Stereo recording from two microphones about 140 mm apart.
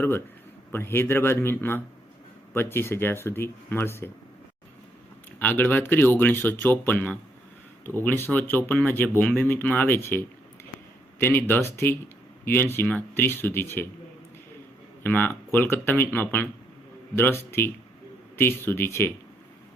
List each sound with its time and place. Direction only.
0.7 s speech: 15° left (ahead or behind)
5.4 s speech: 10° left (ahead or behind)
15.0 s speech: 15° left (ahead or behind)